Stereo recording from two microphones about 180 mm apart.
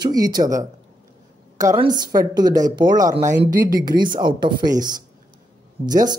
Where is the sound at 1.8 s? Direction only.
25° right (ahead or behind).